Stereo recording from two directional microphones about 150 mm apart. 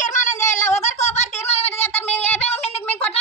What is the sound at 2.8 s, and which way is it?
Music, 10° left (ahead or behind).